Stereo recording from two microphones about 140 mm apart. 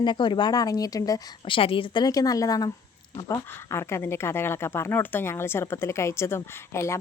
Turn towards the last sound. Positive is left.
turn(degrees=20)  # may be behind; listen again after turning